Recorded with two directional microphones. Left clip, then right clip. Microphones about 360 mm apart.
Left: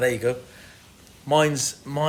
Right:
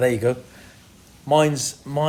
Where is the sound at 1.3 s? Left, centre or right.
Centre.